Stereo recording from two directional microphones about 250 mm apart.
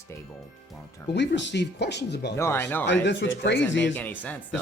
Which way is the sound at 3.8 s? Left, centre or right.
Centre.